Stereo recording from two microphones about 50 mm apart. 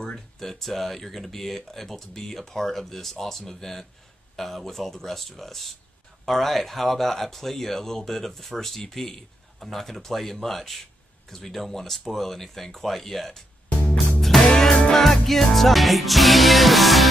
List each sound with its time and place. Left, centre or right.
0.0 s speech: centre
13.7 s music: left
14.2 s music: centre